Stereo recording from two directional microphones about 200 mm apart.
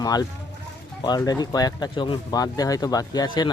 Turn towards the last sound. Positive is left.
turn(degrees=20)  # may be behind; listen again after turning